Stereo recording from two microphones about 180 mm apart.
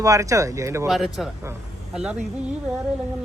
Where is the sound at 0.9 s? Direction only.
Centre (ahead or behind).